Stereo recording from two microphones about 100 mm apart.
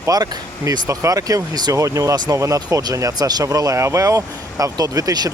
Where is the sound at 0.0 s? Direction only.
35° right (ahead or behind).